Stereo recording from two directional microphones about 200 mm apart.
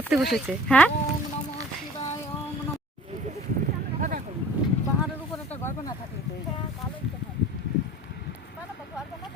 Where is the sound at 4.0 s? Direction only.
45° right (ahead or behind).